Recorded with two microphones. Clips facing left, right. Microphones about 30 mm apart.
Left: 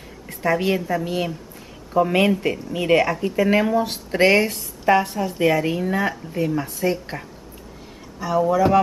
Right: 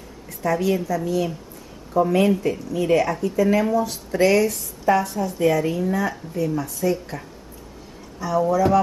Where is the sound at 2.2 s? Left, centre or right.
Left.